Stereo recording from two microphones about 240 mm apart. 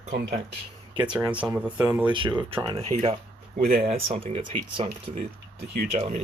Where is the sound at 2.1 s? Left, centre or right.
Right.